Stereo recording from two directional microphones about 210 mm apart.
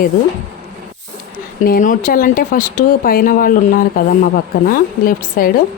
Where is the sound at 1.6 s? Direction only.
40° left (ahead or behind).